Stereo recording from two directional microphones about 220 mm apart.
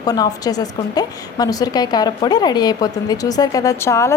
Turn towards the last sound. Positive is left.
turn(degrees=10)  # may be behind; listen again after turning